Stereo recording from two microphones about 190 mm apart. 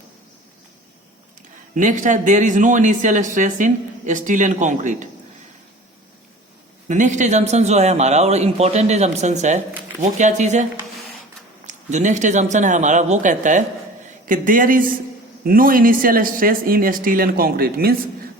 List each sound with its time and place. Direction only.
1.7 s speech: 40° right (ahead or behind)
6.8 s speech: 40° right (ahead or behind)